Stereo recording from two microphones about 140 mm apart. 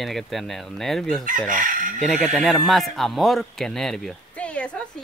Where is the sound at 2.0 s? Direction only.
Centre (ahead or behind).